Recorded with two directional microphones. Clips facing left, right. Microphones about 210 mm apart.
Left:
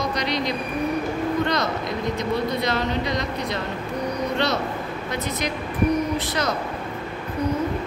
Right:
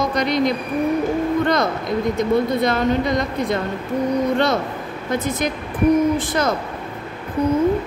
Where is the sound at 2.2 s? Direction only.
50° right (ahead or behind).